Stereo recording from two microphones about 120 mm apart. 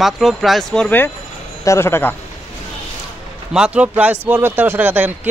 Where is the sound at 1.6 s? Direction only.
20° left (ahead or behind).